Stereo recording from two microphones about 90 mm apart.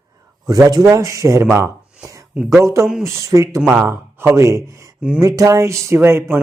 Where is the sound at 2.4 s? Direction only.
35° right (ahead or behind).